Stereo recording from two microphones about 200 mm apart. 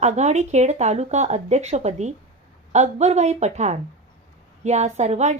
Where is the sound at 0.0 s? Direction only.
35° right (ahead or behind).